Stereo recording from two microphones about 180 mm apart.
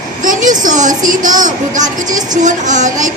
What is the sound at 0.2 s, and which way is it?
A woman's voice, 45° right (ahead or behind).